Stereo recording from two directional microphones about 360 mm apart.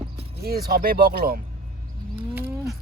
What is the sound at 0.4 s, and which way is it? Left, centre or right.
Speech, right.